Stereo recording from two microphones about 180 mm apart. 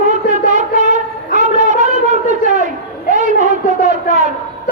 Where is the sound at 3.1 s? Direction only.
45° right (ahead or behind).